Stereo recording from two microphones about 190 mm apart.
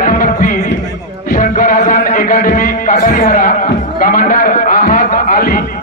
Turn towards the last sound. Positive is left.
turn(degrees=50)  # may be behind; listen again after turning